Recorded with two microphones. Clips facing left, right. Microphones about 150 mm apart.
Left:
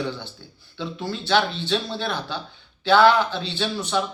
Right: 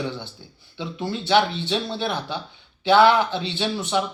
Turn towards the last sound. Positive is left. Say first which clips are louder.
# right 1 dB
turn(degrees=-20)  # may be behind; listen again after turning